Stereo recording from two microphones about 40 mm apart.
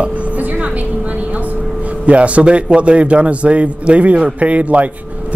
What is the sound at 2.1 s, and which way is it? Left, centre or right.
A man's voice, right.